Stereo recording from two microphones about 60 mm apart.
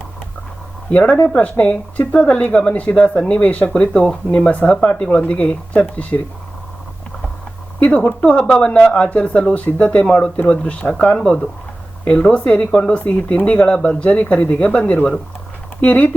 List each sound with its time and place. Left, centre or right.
0.9 s speech: left
7.8 s speech: left